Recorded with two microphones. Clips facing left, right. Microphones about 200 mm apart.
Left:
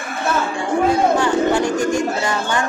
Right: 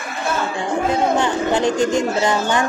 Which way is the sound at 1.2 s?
20° right (ahead or behind).